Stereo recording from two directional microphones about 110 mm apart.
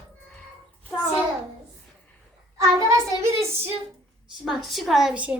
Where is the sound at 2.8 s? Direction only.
25° right (ahead or behind).